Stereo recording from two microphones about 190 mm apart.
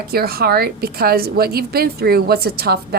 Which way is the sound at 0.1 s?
55° right (ahead or behind).